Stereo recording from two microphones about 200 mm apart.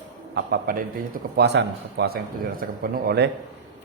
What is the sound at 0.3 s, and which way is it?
A man's voice, 55° right (ahead or behind).